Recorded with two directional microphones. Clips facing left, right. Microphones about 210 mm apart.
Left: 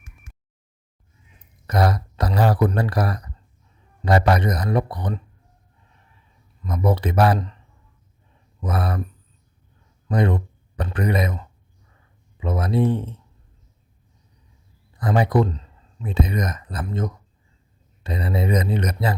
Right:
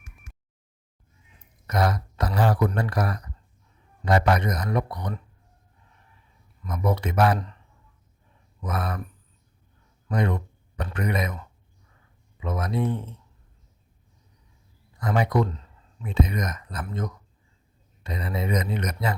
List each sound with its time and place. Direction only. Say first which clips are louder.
1.6 s a man's voice: left 3 dB; 35° left (ahead or behind)
6.7 s a man's voice: left 4 dB; 35° left (ahead or behind)
8.6 s a man's voice: left 4 dB; 30° left (ahead or behind)
10.1 s a man's voice: left 4 dB; 35° left (ahead or behind)
14.9 s a man's voice: left 4 dB; 35° left (ahead or behind)